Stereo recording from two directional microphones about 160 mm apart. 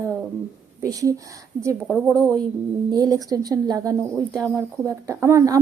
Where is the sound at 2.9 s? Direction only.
25° right (ahead or behind).